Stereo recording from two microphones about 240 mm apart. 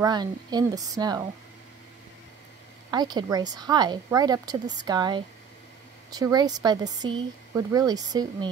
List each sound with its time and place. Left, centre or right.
0.0 s speech: centre
2.9 s speech: centre